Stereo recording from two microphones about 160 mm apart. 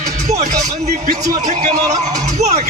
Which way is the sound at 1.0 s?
45° right (ahead or behind).